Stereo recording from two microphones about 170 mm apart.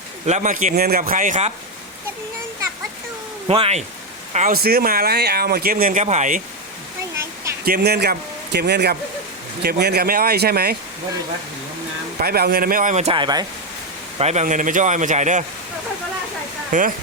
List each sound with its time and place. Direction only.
0.3 s speech: 45° right (ahead or behind)
3.4 s a man's voice: 35° right (ahead or behind)
4.5 s speech: 65° right (ahead or behind); by 6.4 s 45° right (ahead or behind)
7.6 s speech: 65° right (ahead or behind)
12.2 s speech: 65° right (ahead or behind); by 13.1 s 40° right (ahead or behind)
13.1 s speech: 25° right (ahead or behind)
14.2 s speech: 40° right (ahead or behind)
16.7 s speech: 50° right (ahead or behind)